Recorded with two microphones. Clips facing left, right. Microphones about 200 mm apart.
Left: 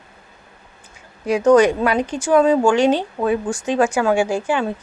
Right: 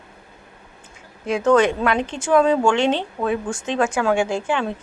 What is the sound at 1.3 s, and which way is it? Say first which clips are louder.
A woman's voice: left 4 dB; 10° left (ahead or behind).